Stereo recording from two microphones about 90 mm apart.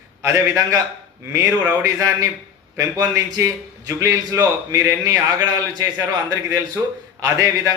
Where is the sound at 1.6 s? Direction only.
40° right (ahead or behind).